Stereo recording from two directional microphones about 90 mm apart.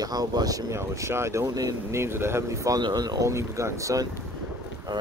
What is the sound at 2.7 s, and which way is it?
Speech, 50° right (ahead or behind).